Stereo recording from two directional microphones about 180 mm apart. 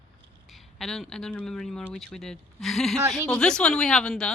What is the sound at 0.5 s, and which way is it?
Speech, centre (ahead or behind).